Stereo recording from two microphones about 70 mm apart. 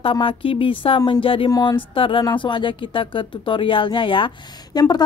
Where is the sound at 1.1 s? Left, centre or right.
Left.